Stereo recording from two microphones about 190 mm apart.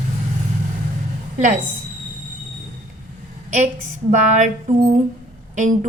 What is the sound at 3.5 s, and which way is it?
A woman's voice, 40° right (ahead or behind).